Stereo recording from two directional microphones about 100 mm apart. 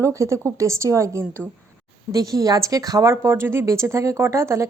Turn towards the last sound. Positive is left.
turn(degrees=-30)  # may be behind; listen again after turning